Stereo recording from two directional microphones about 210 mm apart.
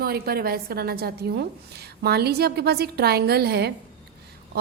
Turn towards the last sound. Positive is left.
turn(degrees=-50)  # may be behind; listen again after turning